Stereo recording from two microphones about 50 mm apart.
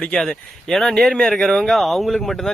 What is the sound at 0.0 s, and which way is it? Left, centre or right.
Speech, centre.